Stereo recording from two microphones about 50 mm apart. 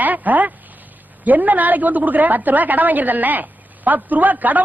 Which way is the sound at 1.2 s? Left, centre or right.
Right.